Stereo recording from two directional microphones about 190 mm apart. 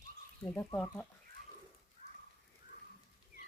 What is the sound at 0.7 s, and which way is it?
Speech, 5° left (ahead or behind).